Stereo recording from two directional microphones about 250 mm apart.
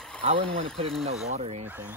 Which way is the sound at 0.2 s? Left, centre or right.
Right.